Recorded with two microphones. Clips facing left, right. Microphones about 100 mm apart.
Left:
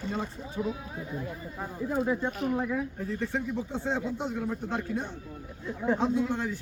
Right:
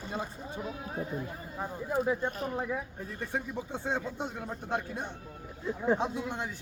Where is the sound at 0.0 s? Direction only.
10° right (ahead or behind).